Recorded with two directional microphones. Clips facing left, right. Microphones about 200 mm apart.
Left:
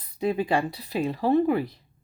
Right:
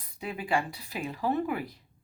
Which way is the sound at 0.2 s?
35° left (ahead or behind).